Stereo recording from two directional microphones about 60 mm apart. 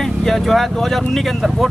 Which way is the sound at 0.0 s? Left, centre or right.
Centre.